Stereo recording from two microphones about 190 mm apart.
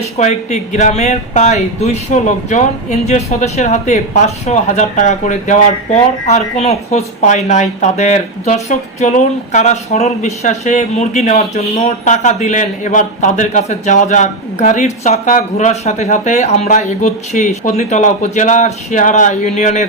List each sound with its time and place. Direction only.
0.2 s speech: 35° left (ahead or behind)